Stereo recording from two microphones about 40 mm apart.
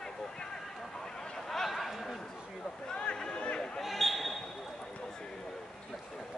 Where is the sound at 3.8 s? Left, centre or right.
Centre.